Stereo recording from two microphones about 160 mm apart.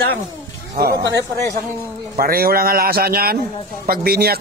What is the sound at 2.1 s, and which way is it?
A man's voice, 65° right (ahead or behind).